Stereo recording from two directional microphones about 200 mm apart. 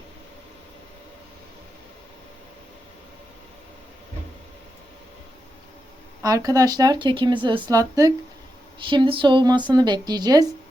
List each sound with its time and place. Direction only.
6.2 s speech: 15° right (ahead or behind)